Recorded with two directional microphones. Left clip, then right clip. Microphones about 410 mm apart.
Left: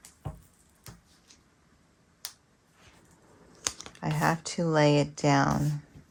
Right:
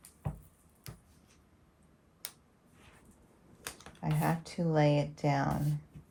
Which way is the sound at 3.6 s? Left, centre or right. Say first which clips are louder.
Left 7 dB; centre.